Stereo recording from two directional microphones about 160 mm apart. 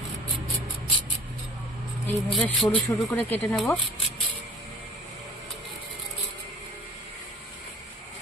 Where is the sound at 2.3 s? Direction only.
5° left (ahead or behind).